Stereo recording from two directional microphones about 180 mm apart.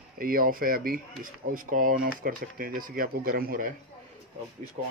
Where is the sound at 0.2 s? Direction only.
50° right (ahead or behind).